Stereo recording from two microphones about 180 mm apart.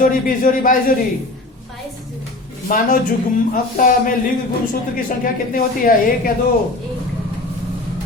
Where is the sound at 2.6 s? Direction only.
50° left (ahead or behind).